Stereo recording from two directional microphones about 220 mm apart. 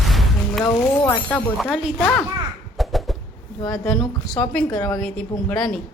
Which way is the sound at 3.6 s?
15° left (ahead or behind).